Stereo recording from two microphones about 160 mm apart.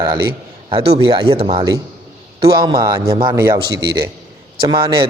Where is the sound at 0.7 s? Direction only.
35° right (ahead or behind).